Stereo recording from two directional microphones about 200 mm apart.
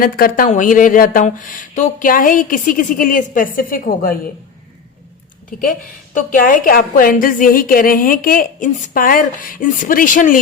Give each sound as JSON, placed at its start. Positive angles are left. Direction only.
{"t": 0.0, "sound": "speech", "side_deg": 45}
{"t": 5.5, "sound": "a woman's voice", "side_deg": 45}